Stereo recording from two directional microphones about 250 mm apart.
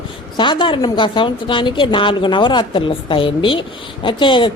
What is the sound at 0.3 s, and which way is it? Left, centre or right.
A woman's voice, centre.